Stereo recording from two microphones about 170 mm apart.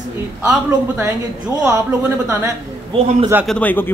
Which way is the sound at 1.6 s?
15° right (ahead or behind).